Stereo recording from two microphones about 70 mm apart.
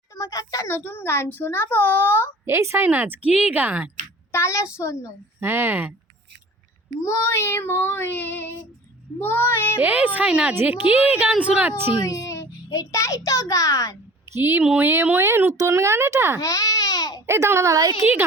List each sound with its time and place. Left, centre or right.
0.2 s a sound: left
0.9 s child singing: left
1.4 s a child's voice: left
2.4 s a woman's voice: right
4.3 s a child's voice: left
5.4 s speech: right
7.0 s child singing: left
9.8 s a woman's voice: right
10.5 s a woman's voice: right
12.0 s child singing: left
12.9 s a child's voice: left
14.3 s speech: right
16.4 s baby cry: left
17.2 s speech: right